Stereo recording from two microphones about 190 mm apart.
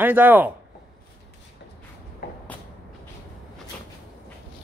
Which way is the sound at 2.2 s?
50° left (ahead or behind).